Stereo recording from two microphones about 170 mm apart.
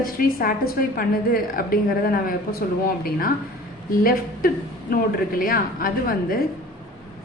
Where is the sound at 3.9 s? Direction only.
55° left (ahead or behind).